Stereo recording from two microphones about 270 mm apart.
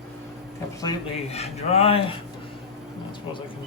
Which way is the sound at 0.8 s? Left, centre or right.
Left.